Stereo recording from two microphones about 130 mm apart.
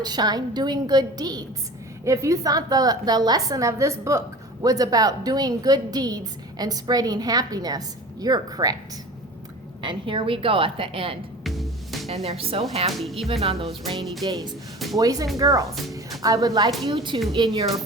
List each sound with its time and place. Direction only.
0.0 s a woman's voice: 30° right (ahead or behind)
9.8 s a woman's voice: 40° right (ahead or behind)
11.4 s music: centre (ahead or behind)
12.0 s a woman's voice: 55° right (ahead or behind)
14.0 s music: centre (ahead or behind)
14.3 s a woman's voice: 30° right (ahead or behind)